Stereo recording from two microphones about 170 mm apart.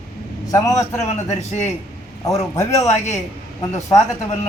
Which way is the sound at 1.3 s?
40° left (ahead or behind).